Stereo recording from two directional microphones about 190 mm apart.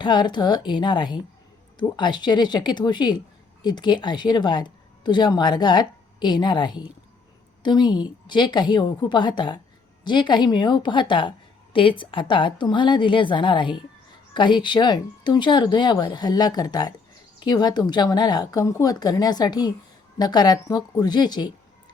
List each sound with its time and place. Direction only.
0.0 s a woman's voice: 25° left (ahead or behind)